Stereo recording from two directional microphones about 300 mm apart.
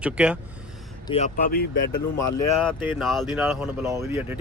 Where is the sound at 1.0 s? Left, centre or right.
Left.